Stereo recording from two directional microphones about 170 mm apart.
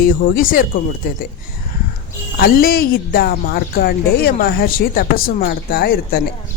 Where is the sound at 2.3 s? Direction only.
65° left (ahead or behind).